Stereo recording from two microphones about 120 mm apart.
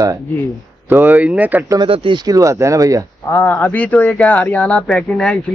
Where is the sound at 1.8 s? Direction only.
50° right (ahead or behind).